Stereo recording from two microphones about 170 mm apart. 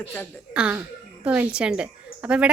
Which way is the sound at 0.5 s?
5° right (ahead or behind).